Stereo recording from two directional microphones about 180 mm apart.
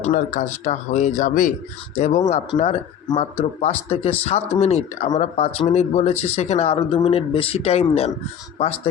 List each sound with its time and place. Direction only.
0.0 s speech: 40° left (ahead or behind)